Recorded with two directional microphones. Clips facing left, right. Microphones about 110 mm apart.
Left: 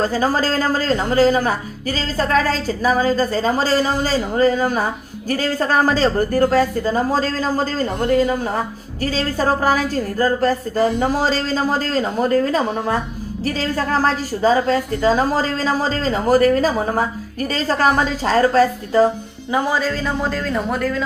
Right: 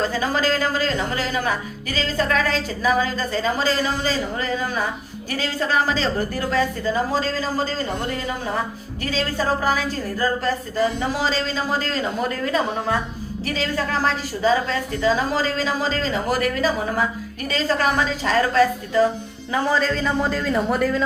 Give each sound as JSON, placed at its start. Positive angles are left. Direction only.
{"t": 0.0, "sound": "a woman's voice", "side_deg": 40}
{"t": 19.5, "sound": "a man's voice", "side_deg": 15}